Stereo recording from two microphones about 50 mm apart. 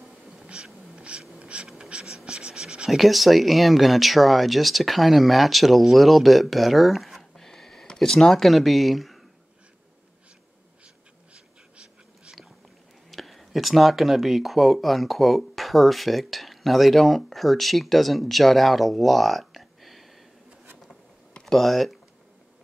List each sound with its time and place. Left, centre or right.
1.4 s insect: right
1.9 s writing: centre
2.9 s speech: centre
11.3 s a sound: centre
13.1 s speech: centre
21.3 s a sound: centre